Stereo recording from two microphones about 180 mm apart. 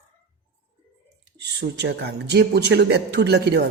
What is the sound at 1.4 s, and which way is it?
A man's voice, 70° right (ahead or behind).